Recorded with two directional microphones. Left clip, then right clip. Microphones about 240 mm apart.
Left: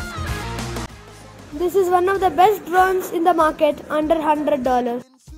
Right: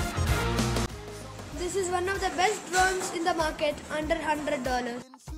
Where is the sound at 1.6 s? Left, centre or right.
Left.